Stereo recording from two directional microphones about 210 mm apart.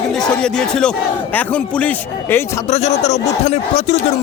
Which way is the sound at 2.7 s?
35° left (ahead or behind).